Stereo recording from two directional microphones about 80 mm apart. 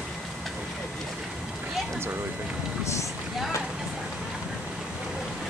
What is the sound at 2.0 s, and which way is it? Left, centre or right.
Speech, right.